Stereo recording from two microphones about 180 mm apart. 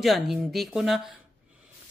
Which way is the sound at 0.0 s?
Centre (ahead or behind).